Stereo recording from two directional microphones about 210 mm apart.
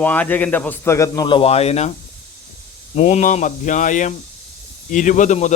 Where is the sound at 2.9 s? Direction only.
35° left (ahead or behind).